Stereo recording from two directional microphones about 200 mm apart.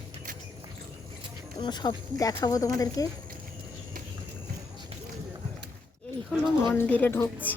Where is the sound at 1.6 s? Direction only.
20° left (ahead or behind).